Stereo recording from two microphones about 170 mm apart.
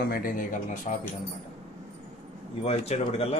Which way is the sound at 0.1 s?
55° left (ahead or behind).